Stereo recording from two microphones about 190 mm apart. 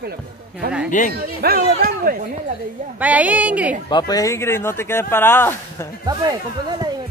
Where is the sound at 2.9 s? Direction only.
10° right (ahead or behind).